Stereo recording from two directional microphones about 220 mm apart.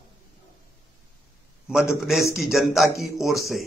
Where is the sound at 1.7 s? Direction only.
Centre (ahead or behind).